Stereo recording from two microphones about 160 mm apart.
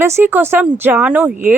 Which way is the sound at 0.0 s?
15° right (ahead or behind).